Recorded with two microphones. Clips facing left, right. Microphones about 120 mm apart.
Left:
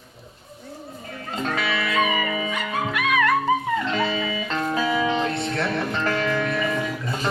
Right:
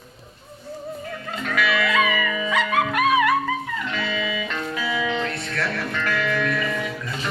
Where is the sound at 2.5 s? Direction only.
85° right.